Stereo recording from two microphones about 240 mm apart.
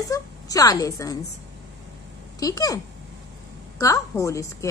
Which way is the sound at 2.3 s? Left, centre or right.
Centre.